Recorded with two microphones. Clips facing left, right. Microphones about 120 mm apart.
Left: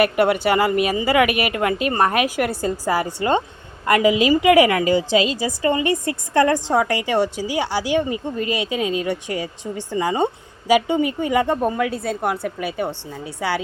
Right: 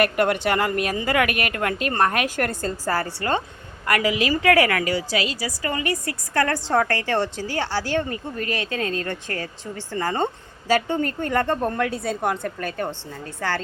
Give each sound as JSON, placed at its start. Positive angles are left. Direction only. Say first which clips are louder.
{"t": 0.0, "sound": "a woman's voice", "louder": "left 3 dB", "side_deg": 5}